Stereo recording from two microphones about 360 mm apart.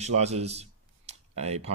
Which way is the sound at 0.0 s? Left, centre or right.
Centre.